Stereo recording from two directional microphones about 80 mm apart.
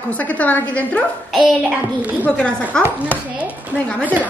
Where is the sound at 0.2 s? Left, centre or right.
Centre.